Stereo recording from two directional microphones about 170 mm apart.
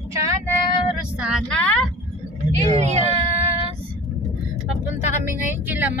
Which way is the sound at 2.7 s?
40° right (ahead or behind).